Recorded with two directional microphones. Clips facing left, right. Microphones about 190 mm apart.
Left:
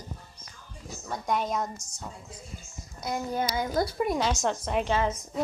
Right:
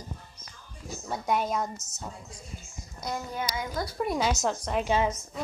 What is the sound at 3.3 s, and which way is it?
Speech, 40° left (ahead or behind).